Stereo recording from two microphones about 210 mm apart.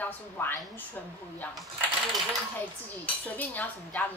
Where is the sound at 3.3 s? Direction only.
10° left (ahead or behind).